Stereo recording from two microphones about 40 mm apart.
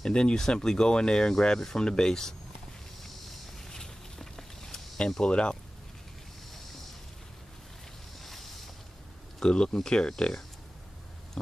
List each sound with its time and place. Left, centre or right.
0.0 s speech: left
3.5 s walk: centre
5.2 s speech: left
8.2 s a sound: centre
9.4 s speech: left